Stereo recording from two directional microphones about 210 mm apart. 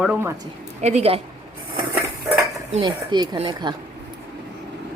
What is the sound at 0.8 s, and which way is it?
Speech, 30° right (ahead or behind).